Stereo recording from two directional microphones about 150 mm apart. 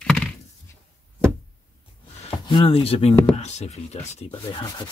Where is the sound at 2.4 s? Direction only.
35° left (ahead or behind).